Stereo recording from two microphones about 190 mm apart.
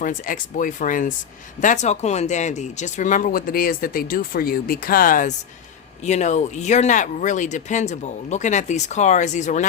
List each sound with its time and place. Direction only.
0.0 s speech: 45° left (ahead or behind)